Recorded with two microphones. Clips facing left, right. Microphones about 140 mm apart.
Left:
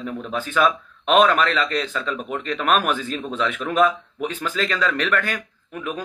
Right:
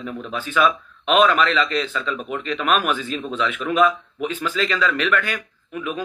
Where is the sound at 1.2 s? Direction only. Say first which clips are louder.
Right 1 dB; 50° left (ahead or behind).